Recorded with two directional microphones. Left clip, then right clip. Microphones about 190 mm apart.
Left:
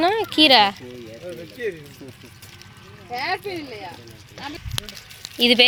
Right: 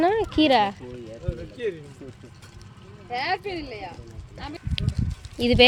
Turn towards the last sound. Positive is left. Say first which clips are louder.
# left 3 dB
turn(degrees=-5)  # may be behind; listen again after turning